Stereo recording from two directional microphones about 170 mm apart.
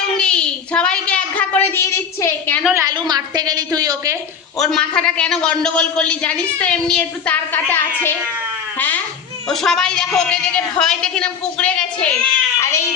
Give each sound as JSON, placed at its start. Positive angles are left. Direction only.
{"t": 0.2, "sound": "a woman's voice", "side_deg": 5}
{"t": 2.7, "sound": "a woman's voice", "side_deg": -25}
{"t": 4.5, "sound": "a man's voice", "side_deg": 0}
{"t": 9.5, "sound": "a man's voice", "side_deg": 0}
{"t": 12.5, "sound": "a man's voice", "side_deg": 15}